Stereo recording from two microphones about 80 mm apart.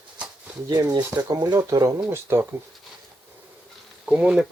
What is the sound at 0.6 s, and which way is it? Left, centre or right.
Speech, right.